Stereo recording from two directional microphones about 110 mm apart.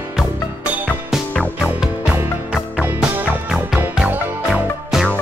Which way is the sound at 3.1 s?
15° right (ahead or behind).